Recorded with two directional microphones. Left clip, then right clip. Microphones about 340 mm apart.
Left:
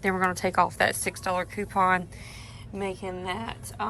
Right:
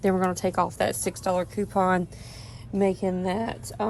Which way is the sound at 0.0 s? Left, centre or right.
Centre.